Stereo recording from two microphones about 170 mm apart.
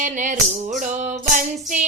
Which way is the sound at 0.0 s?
50° right (ahead or behind).